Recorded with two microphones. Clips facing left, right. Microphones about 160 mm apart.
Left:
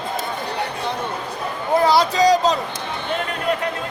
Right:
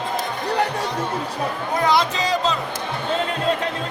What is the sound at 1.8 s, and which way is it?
Speech, 35° left (ahead or behind).